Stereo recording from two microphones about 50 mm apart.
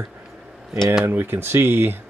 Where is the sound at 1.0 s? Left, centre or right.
Right.